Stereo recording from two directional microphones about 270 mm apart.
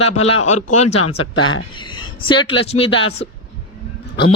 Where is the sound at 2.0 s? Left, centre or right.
Centre.